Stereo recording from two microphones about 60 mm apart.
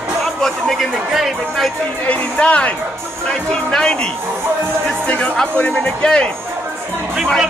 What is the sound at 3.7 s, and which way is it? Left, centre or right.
Speech, centre.